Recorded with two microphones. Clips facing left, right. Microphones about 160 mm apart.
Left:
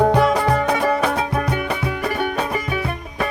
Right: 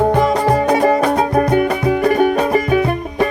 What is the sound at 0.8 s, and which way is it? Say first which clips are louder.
Music: right 6 dB; 40° right (ahead or behind).